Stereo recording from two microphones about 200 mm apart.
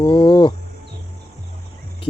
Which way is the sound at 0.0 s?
25° left (ahead or behind).